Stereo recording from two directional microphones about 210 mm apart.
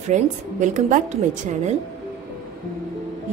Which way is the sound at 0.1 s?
35° right (ahead or behind).